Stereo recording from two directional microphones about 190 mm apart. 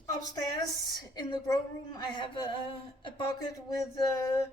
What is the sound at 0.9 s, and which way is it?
A woman's voice, 20° left (ahead or behind).